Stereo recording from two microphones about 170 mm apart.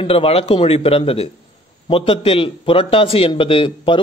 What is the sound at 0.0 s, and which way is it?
A man's voice, 35° left (ahead or behind).